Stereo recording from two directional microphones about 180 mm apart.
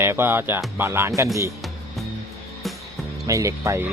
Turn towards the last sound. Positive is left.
turn(degrees=-15)  # may be behind; listen again after turning